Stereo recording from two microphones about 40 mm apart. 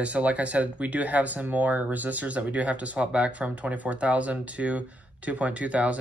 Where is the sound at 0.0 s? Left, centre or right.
Right.